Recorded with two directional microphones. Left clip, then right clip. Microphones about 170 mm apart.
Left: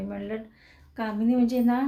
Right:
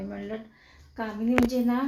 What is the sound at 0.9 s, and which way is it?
Speech, 25° left (ahead or behind).